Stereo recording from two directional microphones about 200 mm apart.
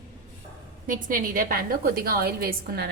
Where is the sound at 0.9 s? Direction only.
45° right (ahead or behind).